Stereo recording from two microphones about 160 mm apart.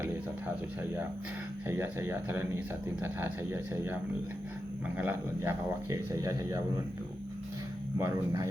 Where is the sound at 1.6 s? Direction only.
15° right (ahead or behind).